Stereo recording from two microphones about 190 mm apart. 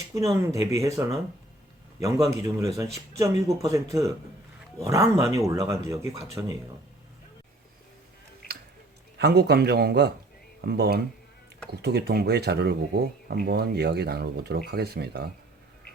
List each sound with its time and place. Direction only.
0.1 s speech: 15° right (ahead or behind)
9.1 s speech: 60° right (ahead or behind)